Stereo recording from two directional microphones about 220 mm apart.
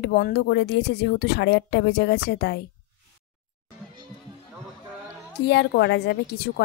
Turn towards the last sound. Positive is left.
turn(degrees=45)  # may be behind; listen again after turning